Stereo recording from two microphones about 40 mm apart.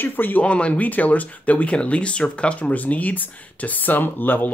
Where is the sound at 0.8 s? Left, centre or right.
Left.